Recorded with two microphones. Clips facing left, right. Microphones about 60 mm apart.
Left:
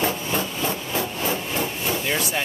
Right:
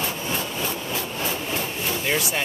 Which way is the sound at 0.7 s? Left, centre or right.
Left.